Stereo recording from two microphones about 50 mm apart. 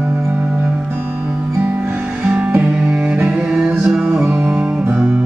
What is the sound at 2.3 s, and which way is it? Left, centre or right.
Music, right.